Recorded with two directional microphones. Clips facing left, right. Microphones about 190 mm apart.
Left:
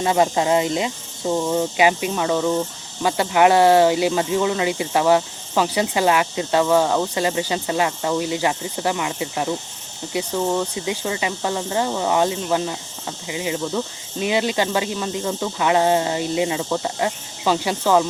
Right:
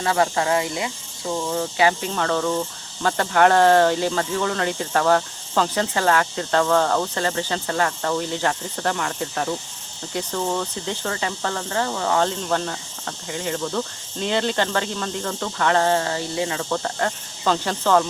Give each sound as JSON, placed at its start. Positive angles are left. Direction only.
{"t": 0.0, "sound": "speech", "side_deg": 20}